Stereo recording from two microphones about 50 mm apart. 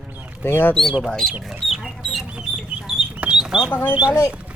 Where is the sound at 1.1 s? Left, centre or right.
Centre.